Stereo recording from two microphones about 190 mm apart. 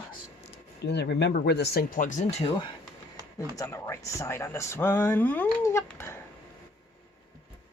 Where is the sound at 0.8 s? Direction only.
60° left (ahead or behind); by 2.2 s 45° left (ahead or behind).